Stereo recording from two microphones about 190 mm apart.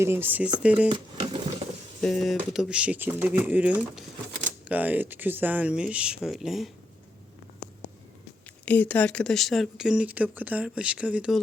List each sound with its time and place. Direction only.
0.0 s speech: 10° right (ahead or behind)
0.9 s speech: 25° right (ahead or behind)
2.0 s speech: centre (ahead or behind)
8.6 s speech: 10° left (ahead or behind)